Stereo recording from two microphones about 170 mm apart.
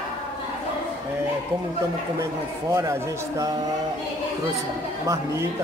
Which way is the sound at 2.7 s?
15° right (ahead or behind).